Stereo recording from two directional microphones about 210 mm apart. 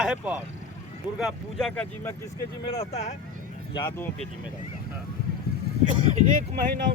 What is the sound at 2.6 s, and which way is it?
Speech, 30° left (ahead or behind).